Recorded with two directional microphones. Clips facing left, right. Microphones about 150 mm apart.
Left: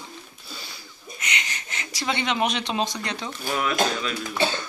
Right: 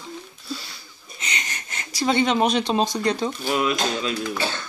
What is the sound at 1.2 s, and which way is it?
Wheeze, 35° right (ahead or behind).